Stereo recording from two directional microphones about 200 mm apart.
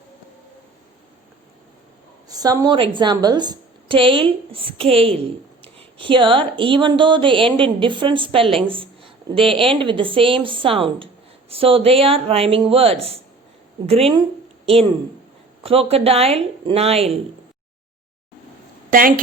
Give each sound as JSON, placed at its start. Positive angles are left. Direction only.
{"t": 2.3, "sound": "a woman's voice", "side_deg": -20}
{"t": 15.6, "sound": "speech", "side_deg": -30}
{"t": 18.9, "sound": "a woman's voice", "side_deg": -45}